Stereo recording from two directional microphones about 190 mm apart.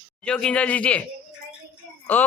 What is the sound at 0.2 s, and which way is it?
Speech, 5° left (ahead or behind).